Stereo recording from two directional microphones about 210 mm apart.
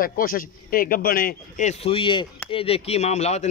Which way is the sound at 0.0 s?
45° left (ahead or behind).